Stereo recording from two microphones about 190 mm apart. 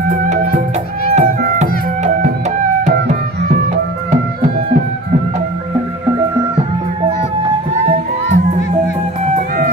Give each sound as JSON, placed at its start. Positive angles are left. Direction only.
{"t": 0.1, "sound": "music", "side_deg": -45}